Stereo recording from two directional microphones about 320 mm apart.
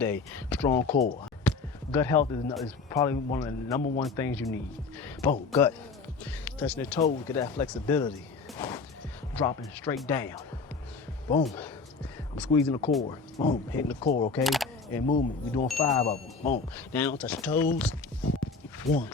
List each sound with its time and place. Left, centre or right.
0.0 s speech: centre
1.5 s a sound: centre
2.6 s speech: centre
8.5 s music: centre
9.3 s speech: centre
11.4 s speech: centre
14.0 s speech: centre
14.4 s single-lens reflex camera: centre
15.0 s speech: left
15.5 s speech: centre
16.0 s speech: centre
16.7 s speech: centre